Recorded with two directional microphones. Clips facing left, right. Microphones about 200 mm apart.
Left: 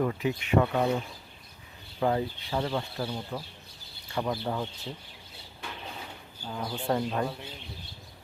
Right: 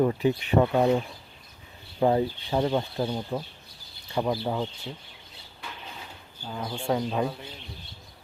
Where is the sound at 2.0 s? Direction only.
25° right (ahead or behind).